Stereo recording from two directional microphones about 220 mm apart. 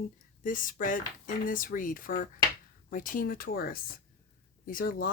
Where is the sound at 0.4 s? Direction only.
40° left (ahead or behind).